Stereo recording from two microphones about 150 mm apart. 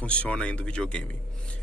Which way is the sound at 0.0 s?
10° left (ahead or behind).